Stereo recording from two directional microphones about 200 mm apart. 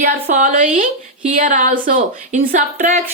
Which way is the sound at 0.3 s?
40° right (ahead or behind).